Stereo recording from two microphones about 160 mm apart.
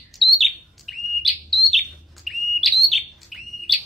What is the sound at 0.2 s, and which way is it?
Bird, centre (ahead or behind).